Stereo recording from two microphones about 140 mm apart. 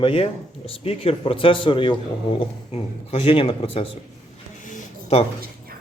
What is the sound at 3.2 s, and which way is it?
Speech, 40° left (ahead or behind).